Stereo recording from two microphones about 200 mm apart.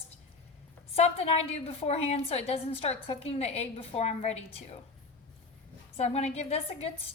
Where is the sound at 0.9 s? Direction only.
30° left (ahead or behind).